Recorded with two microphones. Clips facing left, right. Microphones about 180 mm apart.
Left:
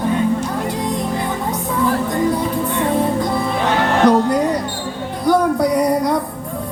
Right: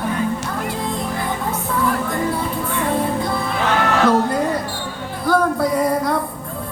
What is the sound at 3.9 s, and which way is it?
Music, 20° left (ahead or behind).